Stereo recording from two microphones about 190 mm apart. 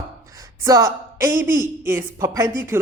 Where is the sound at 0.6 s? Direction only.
15° right (ahead or behind).